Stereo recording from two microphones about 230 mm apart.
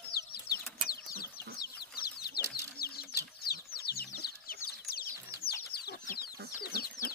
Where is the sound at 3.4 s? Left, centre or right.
Left.